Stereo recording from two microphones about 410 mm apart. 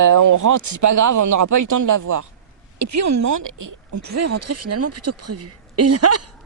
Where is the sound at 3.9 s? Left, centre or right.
Right.